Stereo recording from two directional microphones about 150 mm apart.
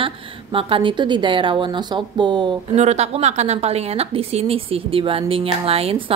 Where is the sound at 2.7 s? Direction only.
45° right (ahead or behind).